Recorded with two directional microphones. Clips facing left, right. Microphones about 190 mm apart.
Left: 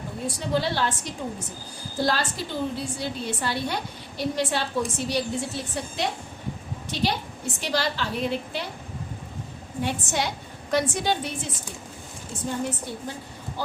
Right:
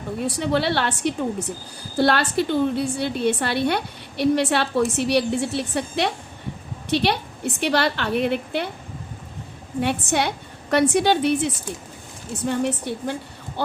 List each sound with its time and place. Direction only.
0.3 s a woman's voice: 65° right (ahead or behind)
9.8 s a woman's voice: 60° right (ahead or behind)